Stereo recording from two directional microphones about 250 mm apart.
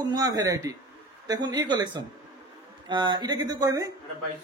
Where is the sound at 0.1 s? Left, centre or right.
Centre.